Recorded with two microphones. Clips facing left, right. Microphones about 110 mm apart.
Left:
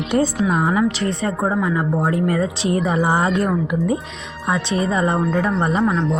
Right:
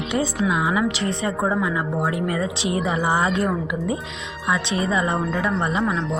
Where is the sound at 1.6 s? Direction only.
30° left (ahead or behind).